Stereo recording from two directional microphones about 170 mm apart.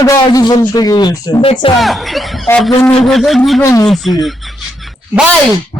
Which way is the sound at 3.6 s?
20° left (ahead or behind).